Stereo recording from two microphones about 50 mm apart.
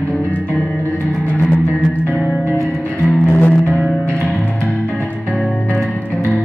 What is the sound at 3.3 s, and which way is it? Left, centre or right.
Music, left.